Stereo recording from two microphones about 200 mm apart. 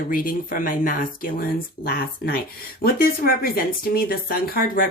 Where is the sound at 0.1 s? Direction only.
45° left (ahead or behind).